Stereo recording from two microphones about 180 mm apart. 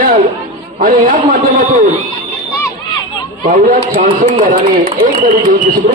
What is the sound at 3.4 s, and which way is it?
A man's voice, 50° right (ahead or behind).